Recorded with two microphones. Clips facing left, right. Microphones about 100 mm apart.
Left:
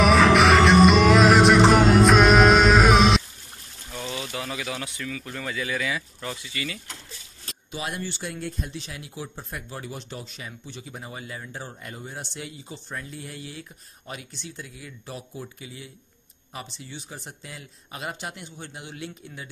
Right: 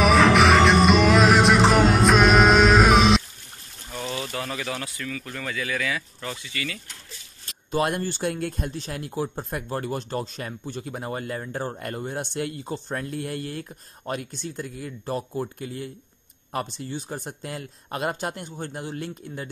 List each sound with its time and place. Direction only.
0.0 s music: centre (ahead or behind)
3.9 s a sound: centre (ahead or behind)
5.0 s speech: 10° left (ahead or behind)
7.7 s speech: 50° right (ahead or behind)